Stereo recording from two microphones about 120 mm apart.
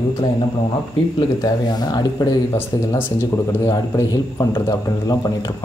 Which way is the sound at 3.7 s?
30° left (ahead or behind).